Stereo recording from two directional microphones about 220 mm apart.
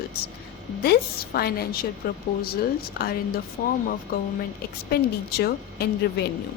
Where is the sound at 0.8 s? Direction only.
45° left (ahead or behind).